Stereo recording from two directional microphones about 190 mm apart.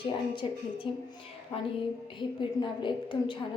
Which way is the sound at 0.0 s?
25° left (ahead or behind).